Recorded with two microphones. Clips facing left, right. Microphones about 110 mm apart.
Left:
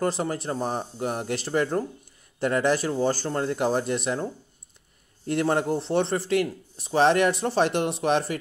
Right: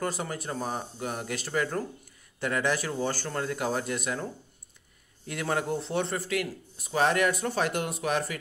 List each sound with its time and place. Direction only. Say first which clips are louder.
0.0 s a man's voice: left 6 dB; 35° left (ahead or behind)